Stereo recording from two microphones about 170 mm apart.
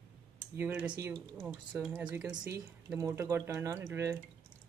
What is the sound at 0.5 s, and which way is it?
Speech, 10° right (ahead or behind).